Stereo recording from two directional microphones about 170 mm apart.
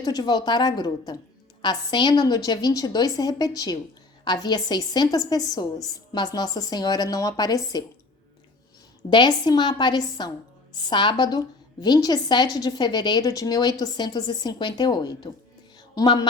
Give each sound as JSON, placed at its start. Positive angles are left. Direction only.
{"t": 0.0, "sound": "a woman's voice", "side_deg": 20}
{"t": 9.0, "sound": "a woman's voice", "side_deg": 25}